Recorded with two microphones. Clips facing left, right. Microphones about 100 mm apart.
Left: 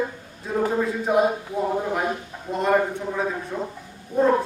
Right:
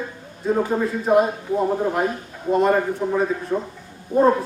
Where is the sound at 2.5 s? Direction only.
Centre (ahead or behind).